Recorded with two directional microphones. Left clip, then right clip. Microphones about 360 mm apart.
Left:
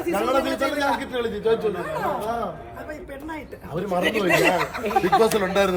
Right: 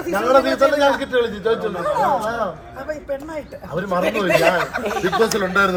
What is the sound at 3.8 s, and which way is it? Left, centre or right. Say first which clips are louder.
Speech: right 2 dB; centre.